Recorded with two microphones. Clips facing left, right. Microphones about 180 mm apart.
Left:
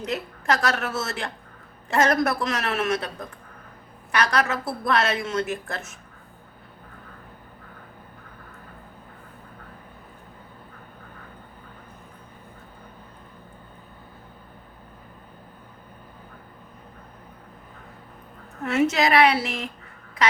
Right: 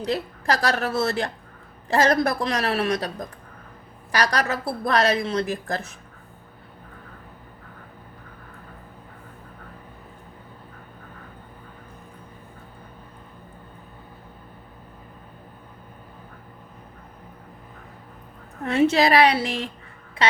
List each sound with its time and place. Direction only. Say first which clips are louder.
0.0 s a woman's voice: right 3 dB; 35° right (ahead or behind)
18.6 s a woman's voice: right 2 dB; 30° right (ahead or behind)